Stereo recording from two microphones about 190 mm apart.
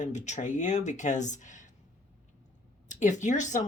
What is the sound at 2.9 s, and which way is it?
Speech, 40° left (ahead or behind).